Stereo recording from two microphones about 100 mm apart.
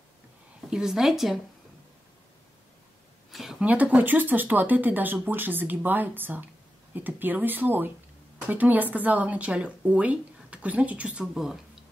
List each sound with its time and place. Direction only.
0.7 s a woman's voice: 5° right (ahead or behind)
3.3 s a sound: centre (ahead or behind)
3.6 s a woman's voice: 15° right (ahead or behind)